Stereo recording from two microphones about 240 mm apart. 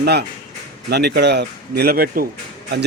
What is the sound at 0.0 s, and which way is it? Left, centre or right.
A man's voice, right.